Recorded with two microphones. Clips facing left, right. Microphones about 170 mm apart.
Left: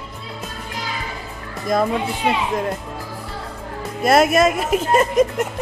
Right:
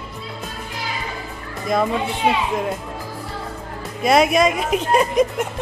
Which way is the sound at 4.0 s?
Centre (ahead or behind).